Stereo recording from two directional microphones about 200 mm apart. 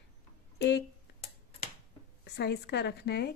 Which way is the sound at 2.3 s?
55° left (ahead or behind).